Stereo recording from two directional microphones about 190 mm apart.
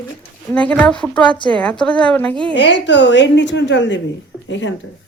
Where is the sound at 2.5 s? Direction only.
65° left (ahead or behind).